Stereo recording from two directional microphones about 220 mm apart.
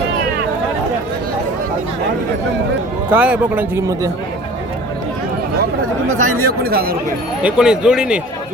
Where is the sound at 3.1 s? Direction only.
5° right (ahead or behind).